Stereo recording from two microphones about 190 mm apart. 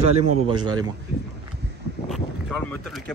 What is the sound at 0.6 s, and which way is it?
Speech, 20° right (ahead or behind).